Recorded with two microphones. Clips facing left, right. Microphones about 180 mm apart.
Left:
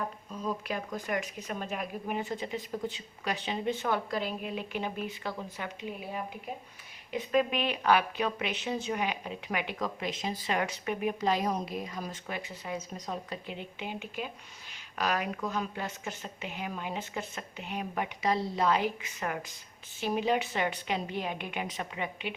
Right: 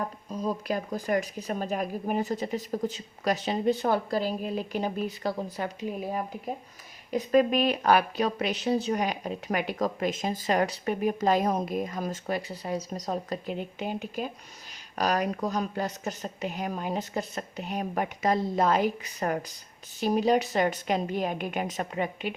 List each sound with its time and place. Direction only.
0.3 s a woman's voice: 40° right (ahead or behind)